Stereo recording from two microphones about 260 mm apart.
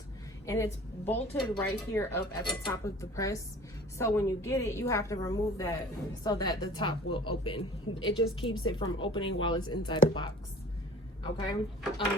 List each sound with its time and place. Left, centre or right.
0.4 s a woman's voice: centre